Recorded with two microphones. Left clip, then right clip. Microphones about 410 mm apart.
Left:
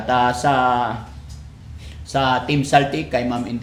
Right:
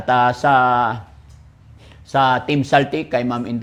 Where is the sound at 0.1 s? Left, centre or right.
Right.